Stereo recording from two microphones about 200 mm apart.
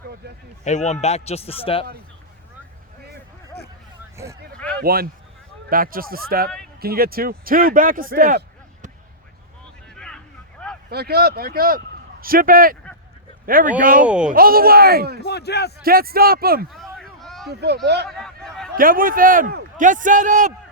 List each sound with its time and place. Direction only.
0.6 s a man's voice: 35° left (ahead or behind)
4.5 s a sound: 5° left (ahead or behind)
4.8 s a man's voice: 50° right (ahead or behind)
9.9 s vehicle: 5° left (ahead or behind)
10.8 s a man's voice: 50° right (ahead or behind)
14.0 s speech: 5° right (ahead or behind)
14.3 s a man's voice: 45° right (ahead or behind)
15.2 s speech: 55° left (ahead or behind)
15.8 s a man's voice: 50° right (ahead or behind)
16.7 s a sound: centre (ahead or behind)
17.5 s speech: 55° right (ahead or behind)
18.1 s a sound: 5° left (ahead or behind)
18.8 s a man's voice: 45° right (ahead or behind)